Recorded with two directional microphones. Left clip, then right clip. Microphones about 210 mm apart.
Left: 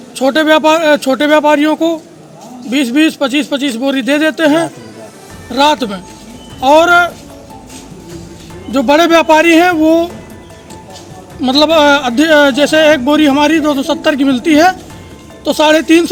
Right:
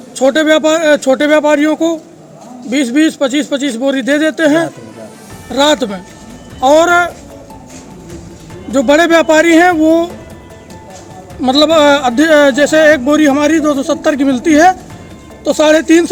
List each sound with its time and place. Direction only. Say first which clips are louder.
0.2 s speech: even; 10° right (ahead or behind)
8.7 s speech: even; 15° right (ahead or behind)
11.3 s speech: even; 15° right (ahead or behind)